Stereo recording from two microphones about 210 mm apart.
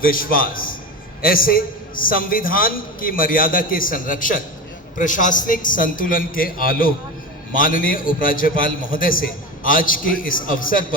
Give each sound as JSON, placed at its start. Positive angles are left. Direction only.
{"t": 0.0, "sound": "a man's voice", "side_deg": 40}